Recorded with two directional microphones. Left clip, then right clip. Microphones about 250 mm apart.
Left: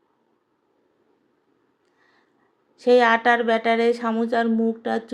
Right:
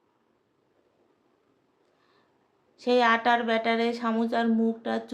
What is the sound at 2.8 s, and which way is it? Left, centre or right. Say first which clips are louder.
A woman's voice: left 6 dB; centre.